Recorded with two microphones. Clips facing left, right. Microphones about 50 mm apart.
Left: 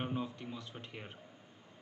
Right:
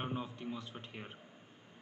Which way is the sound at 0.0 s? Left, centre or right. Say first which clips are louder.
Left 2 dB; centre.